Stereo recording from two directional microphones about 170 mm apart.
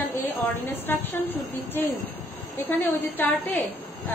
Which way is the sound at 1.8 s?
10° left (ahead or behind).